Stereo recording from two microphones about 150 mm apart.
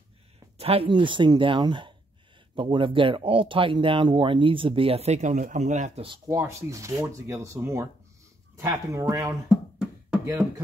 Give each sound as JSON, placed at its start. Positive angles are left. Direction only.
{"t": 0.6, "sound": "speech", "side_deg": -40}
{"t": 6.0, "sound": "speech", "side_deg": -20}